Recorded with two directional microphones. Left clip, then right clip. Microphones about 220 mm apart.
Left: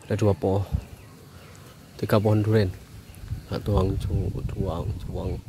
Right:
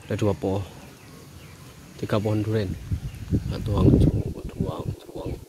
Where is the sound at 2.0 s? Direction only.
20° left (ahead or behind).